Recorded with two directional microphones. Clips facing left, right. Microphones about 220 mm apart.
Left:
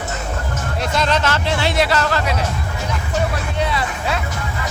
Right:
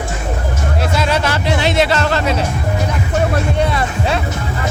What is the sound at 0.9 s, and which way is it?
Music, 10° right (ahead or behind).